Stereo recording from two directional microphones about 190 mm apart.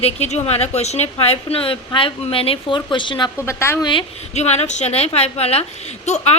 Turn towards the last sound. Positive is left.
turn(degrees=35)  # may be behind; listen again after turning